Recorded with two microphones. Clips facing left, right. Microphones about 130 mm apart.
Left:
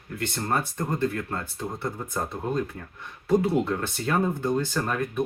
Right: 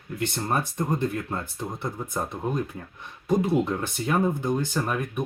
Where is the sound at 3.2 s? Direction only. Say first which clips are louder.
Even; 15° right (ahead or behind).